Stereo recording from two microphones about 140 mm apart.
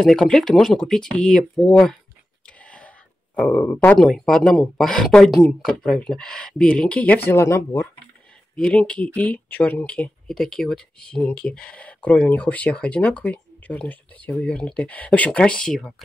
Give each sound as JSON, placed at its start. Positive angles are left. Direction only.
{"t": 0.0, "sound": "speech", "side_deg": 5}
{"t": 2.6, "sound": "whispering", "side_deg": 10}
{"t": 3.3, "sound": "speech", "side_deg": 10}
{"t": 7.2, "sound": "speech", "side_deg": 20}
{"t": 8.5, "sound": "speech", "side_deg": 5}